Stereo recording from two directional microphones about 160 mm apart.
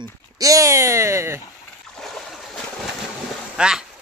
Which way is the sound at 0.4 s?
20° right (ahead or behind).